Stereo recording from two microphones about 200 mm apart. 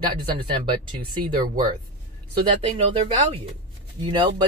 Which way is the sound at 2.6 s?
30° right (ahead or behind).